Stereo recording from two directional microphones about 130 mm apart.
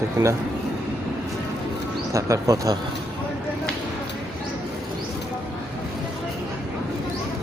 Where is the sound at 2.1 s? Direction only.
25° right (ahead or behind).